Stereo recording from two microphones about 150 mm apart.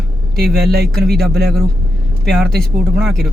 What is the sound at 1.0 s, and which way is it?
Speech, 90° right.